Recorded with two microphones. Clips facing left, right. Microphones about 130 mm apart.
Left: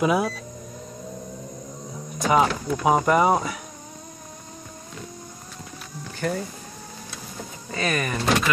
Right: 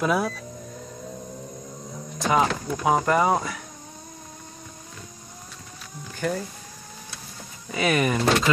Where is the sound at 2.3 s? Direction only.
5° left (ahead or behind).